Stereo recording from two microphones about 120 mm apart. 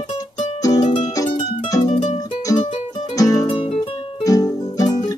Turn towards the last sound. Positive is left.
turn(degrees=30)  # may be behind; listen again after turning